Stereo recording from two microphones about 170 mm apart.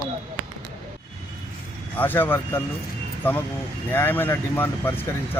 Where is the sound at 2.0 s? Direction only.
10° left (ahead or behind).